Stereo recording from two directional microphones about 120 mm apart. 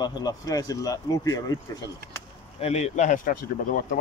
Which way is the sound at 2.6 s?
65° left (ahead or behind).